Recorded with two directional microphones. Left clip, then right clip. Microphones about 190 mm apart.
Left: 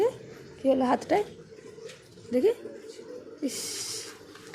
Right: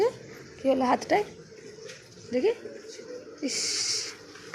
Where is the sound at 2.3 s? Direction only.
25° left (ahead or behind).